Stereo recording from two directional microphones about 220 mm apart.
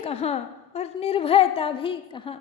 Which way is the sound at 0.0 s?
30° left (ahead or behind).